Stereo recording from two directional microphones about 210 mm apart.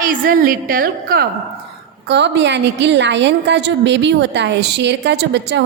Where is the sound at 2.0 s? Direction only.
55° right (ahead or behind).